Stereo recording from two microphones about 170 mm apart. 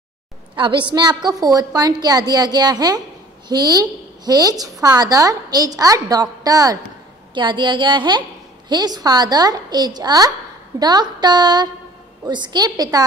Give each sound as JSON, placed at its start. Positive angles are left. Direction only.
{"t": 0.6, "sound": "a woman's voice", "side_deg": -30}